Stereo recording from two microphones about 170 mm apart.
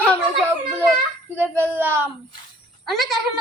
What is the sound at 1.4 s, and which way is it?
Speech, 10° right (ahead or behind).